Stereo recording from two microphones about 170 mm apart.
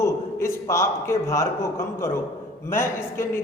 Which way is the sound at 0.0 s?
15° left (ahead or behind).